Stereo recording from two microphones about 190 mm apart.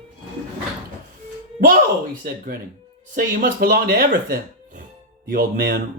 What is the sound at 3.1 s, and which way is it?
Speech, 50° right (ahead or behind).